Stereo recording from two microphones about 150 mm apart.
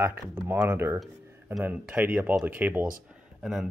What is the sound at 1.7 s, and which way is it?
Speech, 10° right (ahead or behind).